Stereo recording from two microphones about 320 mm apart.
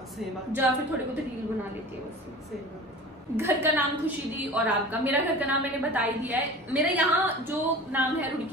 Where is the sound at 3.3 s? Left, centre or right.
Centre.